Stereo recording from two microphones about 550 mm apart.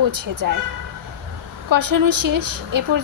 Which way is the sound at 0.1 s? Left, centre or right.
Right.